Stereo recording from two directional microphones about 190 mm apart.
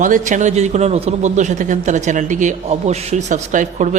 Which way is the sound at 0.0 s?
40° right (ahead or behind).